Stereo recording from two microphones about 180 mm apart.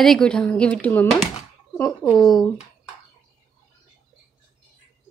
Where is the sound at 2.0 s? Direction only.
20° left (ahead or behind).